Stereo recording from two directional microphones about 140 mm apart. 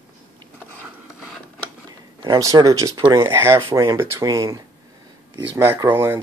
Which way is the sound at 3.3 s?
20° right (ahead or behind).